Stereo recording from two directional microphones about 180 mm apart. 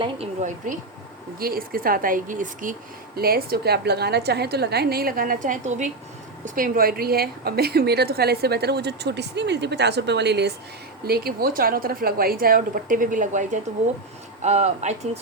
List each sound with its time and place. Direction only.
0.4 s a woman's voice: 45° right (ahead or behind)
3.2 s a woman's voice: 55° right (ahead or behind)
11.0 s a woman's voice: 55° right (ahead or behind); by 15.2 s 40° right (ahead or behind)